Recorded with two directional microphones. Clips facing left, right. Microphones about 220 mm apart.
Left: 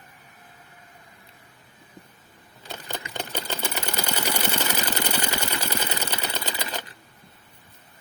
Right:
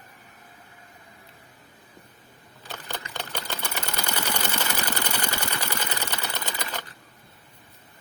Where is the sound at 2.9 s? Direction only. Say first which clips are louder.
Left 3 dB; 20° left (ahead or behind).